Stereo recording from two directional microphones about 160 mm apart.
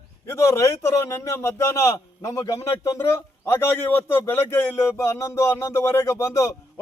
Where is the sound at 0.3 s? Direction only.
15° left (ahead or behind).